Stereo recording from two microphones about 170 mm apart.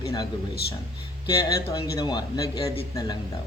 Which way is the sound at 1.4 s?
20° left (ahead or behind).